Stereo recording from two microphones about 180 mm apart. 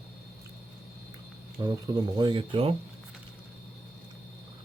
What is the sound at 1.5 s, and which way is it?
Speech, 20° right (ahead or behind).